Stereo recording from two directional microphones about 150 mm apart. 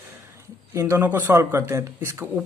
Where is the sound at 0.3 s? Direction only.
20° right (ahead or behind).